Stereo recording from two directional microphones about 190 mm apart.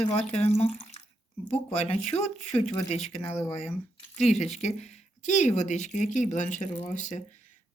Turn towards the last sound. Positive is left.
turn(degrees=40)  # may be behind; listen again after turning